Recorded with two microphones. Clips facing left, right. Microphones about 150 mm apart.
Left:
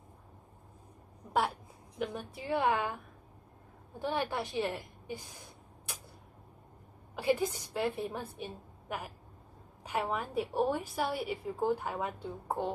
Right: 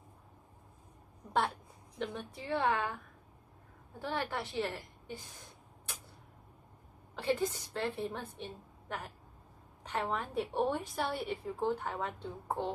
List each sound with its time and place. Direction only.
2.0 s a woman's voice: 10° left (ahead or behind)
4.0 s a woman's voice: 15° left (ahead or behind)
7.2 s a woman's voice: 10° left (ahead or behind)